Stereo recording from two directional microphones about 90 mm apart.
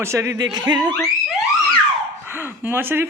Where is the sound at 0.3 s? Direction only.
50° right (ahead or behind).